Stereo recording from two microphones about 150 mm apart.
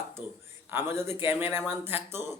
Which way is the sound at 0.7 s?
15° right (ahead or behind).